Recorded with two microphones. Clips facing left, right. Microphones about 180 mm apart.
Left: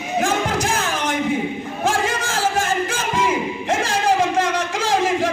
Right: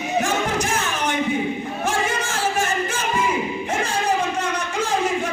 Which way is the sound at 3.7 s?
90° left.